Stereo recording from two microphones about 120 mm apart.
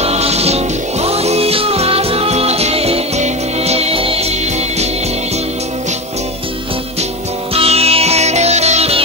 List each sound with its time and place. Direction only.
0.0 s music: 60° right (ahead or behind)
7.5 s music: 55° right (ahead or behind)